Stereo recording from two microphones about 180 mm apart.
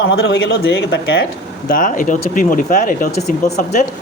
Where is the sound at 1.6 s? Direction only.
50° left (ahead or behind).